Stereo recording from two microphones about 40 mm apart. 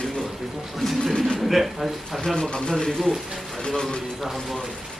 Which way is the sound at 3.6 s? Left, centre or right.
Left.